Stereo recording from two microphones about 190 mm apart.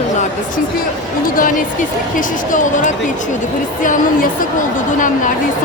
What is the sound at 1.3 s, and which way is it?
A woman's voice, 45° left (ahead or behind).